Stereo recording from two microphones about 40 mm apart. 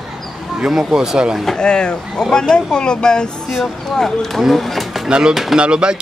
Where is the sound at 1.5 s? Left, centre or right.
Left.